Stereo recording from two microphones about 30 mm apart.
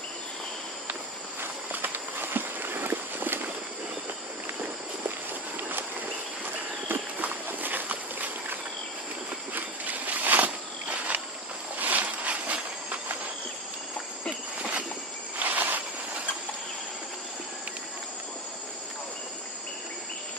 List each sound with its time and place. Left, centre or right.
1.7 s run: right
7.2 s walk: right
7.9 s a sound: right
15.3 s insect: right